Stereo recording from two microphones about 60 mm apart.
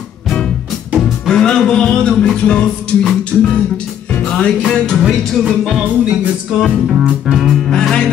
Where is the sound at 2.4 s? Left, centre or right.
Centre.